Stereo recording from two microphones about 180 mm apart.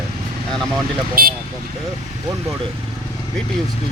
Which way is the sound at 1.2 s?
55° right (ahead or behind).